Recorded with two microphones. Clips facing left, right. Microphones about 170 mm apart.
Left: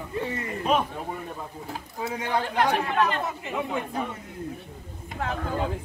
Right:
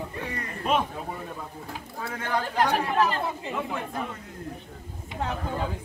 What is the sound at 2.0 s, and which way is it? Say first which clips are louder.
Speech: left 3 dB; 15° left (ahead or behind).